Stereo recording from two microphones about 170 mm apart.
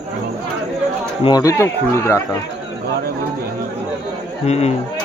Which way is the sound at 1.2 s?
20° left (ahead or behind).